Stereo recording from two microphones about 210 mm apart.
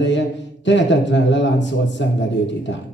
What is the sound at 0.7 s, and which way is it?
A man's voice, 60° left (ahead or behind).